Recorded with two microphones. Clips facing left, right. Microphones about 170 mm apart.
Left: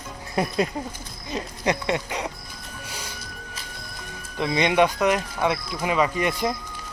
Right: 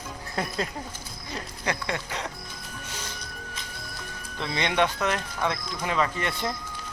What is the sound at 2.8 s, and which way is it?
Music, 10° left (ahead or behind).